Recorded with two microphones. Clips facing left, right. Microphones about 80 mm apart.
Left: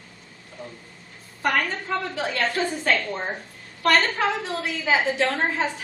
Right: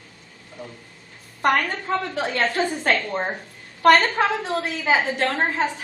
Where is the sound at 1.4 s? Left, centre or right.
Right.